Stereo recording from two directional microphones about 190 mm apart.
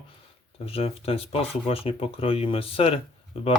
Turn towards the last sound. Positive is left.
turn(degrees=30)  # may be behind; listen again after turning